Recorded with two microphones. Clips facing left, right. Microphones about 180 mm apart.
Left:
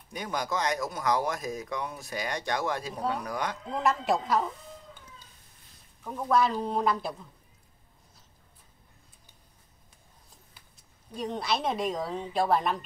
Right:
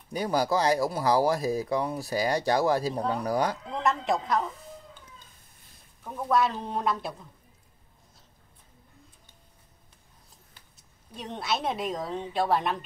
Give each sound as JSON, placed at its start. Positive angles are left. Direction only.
{"t": 0.1, "sound": "speech", "side_deg": -35}
{"t": 3.7, "sound": "a woman's voice", "side_deg": 0}
{"t": 6.0, "sound": "a woman's voice", "side_deg": 0}
{"t": 11.1, "sound": "a woman's voice", "side_deg": 0}